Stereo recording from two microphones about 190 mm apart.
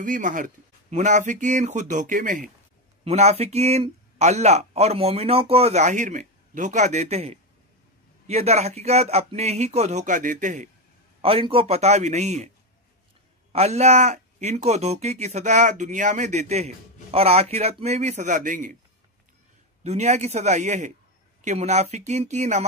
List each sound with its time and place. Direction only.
0.0 s speech: 45° right (ahead or behind)
3.0 s speech: 35° right (ahead or behind)
11.1 s speech: 30° right (ahead or behind)
13.5 s speech: 35° right (ahead or behind)
19.8 s speech: 35° right (ahead or behind)